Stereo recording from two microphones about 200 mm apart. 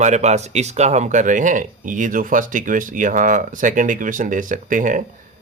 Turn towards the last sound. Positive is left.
turn(degrees=-40)  # may be behind; listen again after turning